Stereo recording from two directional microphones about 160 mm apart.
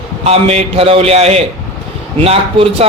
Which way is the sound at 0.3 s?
40° right (ahead or behind).